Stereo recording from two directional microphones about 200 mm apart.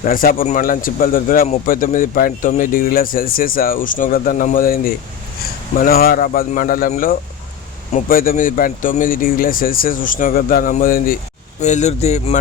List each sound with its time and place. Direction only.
0.0 s a man's voice: 45° left (ahead or behind)